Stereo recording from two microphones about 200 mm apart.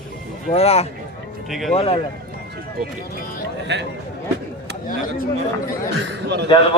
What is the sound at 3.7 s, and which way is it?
Speech, 60° right (ahead or behind).